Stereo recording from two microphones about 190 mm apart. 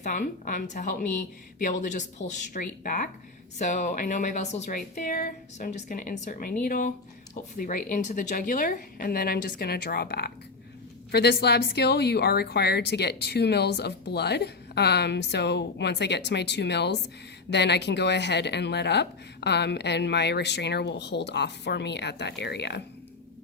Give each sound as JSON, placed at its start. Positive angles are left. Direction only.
{"t": 0.0, "sound": "a woman's voice", "side_deg": 45}